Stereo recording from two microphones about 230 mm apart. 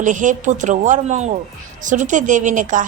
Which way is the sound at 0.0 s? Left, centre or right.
Right.